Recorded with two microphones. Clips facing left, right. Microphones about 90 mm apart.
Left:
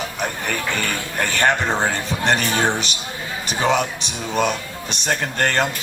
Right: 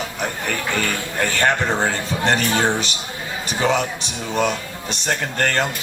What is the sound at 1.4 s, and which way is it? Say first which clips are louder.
Speech: left 1 dB; 20° left (ahead or behind).